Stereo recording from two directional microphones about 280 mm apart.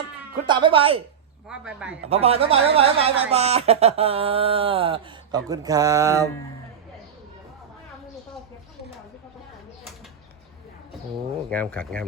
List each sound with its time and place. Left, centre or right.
0.4 s speech: centre
1.5 s speech: centre
2.0 s a man's voice: right
11.4 s speech: centre